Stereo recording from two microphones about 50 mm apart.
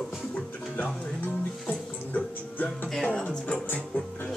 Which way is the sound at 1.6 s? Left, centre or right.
Left.